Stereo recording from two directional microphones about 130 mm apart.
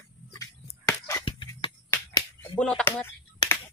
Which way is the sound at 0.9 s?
25° left (ahead or behind).